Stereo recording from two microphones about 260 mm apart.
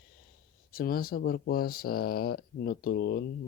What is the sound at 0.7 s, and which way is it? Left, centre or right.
Speech, left.